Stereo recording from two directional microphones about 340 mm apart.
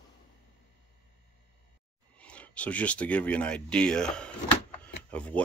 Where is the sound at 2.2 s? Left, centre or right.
Centre.